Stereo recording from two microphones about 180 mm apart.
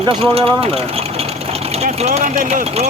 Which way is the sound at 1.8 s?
35° right (ahead or behind).